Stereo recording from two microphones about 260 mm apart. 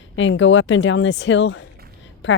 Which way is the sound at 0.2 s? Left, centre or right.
Left.